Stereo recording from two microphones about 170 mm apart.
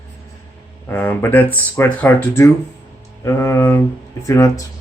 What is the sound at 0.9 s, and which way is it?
Speech, 10° left (ahead or behind).